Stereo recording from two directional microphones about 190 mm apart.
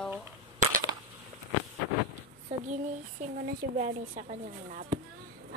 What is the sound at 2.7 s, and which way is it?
Speech, 45° right (ahead or behind).